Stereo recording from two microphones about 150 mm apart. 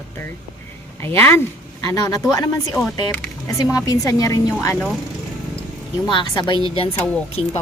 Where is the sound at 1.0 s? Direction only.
15° left (ahead or behind).